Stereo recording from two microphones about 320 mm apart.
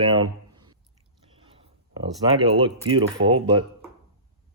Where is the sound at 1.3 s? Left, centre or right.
Centre.